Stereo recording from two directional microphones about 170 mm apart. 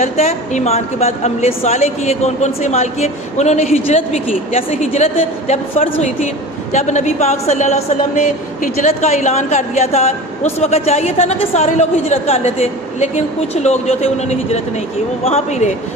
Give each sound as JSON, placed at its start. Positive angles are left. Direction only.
{"t": 0.0, "sound": "a woman's voice", "side_deg": 45}